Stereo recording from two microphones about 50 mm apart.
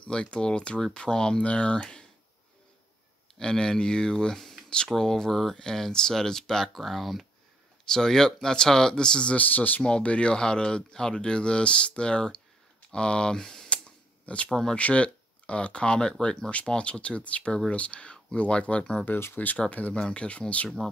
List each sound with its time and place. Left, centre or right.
0.0 s speech: centre
3.3 s speech: centre
7.9 s speech: centre
9.4 s speech: left
9.8 s speech: left
13.4 s speech: centre
14.2 s speech: left
14.5 s speech: centre
14.8 s speech: left
19.3 s speech: left
19.9 s speech: centre